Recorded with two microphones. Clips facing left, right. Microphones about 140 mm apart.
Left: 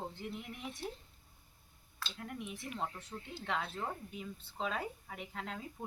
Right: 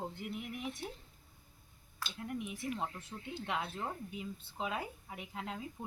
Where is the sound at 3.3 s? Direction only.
15° right (ahead or behind).